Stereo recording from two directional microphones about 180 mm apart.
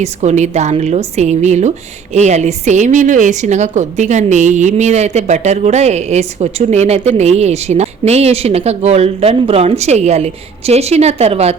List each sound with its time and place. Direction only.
0.0 s a woman's voice: 40° right (ahead or behind)